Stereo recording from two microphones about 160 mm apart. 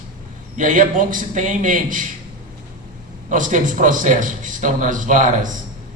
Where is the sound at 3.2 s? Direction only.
55° right (ahead or behind).